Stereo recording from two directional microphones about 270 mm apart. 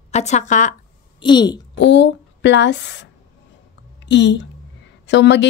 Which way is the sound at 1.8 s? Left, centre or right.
Left.